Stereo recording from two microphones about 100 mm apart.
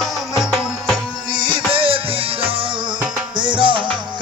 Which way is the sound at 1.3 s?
50° right (ahead or behind).